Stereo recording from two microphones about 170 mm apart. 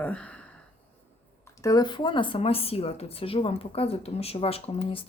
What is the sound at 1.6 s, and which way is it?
Speech, 25° left (ahead or behind).